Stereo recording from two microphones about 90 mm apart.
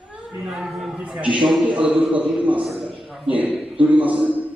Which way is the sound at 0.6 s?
5° right (ahead or behind).